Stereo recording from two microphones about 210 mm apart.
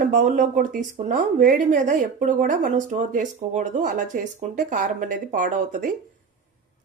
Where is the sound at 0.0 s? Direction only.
35° right (ahead or behind).